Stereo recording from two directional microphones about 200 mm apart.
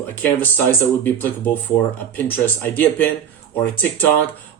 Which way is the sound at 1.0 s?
10° left (ahead or behind).